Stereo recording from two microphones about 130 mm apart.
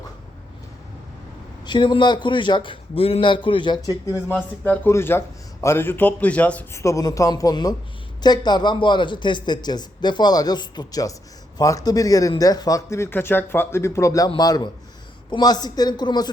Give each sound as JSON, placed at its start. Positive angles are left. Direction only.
{"t": 1.6, "sound": "speech", "side_deg": 35}
{"t": 4.6, "sound": "a man's voice", "side_deg": 15}
{"t": 6.8, "sound": "speech", "side_deg": 25}